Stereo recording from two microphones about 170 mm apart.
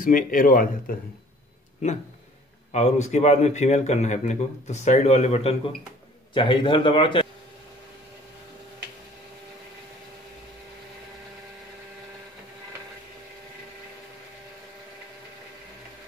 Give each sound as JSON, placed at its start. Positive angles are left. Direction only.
{"t": 0.0, "sound": "speech", "side_deg": 50}
{"t": 2.7, "sound": "a man's voice", "side_deg": 40}